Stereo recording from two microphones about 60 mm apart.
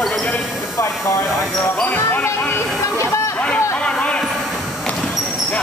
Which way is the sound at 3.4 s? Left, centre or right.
Left.